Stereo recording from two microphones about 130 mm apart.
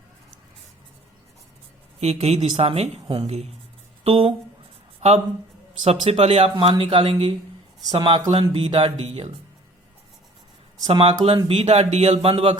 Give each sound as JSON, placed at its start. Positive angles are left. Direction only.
{"t": 2.0, "sound": "speech", "side_deg": -55}
{"t": 5.8, "sound": "speech", "side_deg": -50}
{"t": 10.8, "sound": "speech", "side_deg": -45}
{"t": 11.4, "sound": "speech", "side_deg": -55}